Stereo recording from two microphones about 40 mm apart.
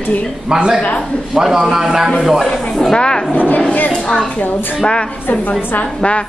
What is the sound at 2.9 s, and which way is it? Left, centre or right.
Speech, left.